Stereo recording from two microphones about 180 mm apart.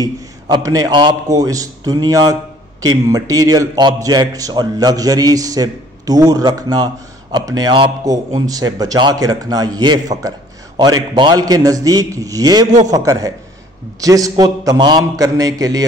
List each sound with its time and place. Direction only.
0.0 s a man's voice: 20° right (ahead or behind)